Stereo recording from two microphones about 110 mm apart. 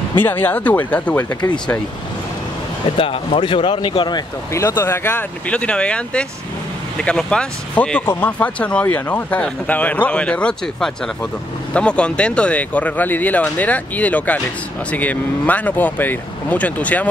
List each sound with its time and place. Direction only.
0.2 s speech: 15° left (ahead or behind)
3.0 s speech: 55° left (ahead or behind)
4.5 s speech: 25° left (ahead or behind)